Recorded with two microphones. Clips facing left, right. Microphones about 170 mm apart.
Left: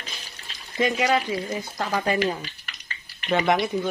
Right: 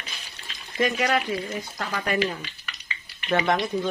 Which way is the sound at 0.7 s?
20° left (ahead or behind).